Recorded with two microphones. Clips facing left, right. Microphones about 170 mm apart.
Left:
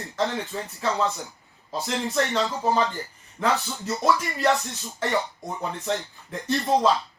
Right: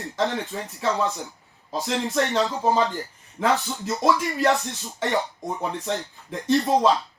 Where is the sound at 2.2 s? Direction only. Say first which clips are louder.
Right 2 dB; 20° right (ahead or behind).